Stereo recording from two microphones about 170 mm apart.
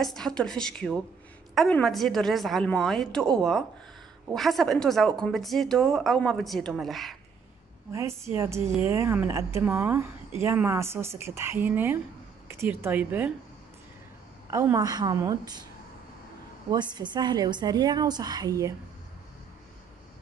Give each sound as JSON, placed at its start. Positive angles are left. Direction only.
{"t": 0.0, "sound": "a woman's voice", "side_deg": 5}
{"t": 7.9, "sound": "a woman's voice", "side_deg": -15}
{"t": 14.5, "sound": "a woman's voice", "side_deg": -15}
{"t": 16.7, "sound": "a woman's voice", "side_deg": -25}